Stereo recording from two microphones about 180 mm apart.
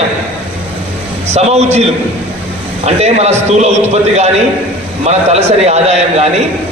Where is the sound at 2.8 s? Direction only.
35° right (ahead or behind).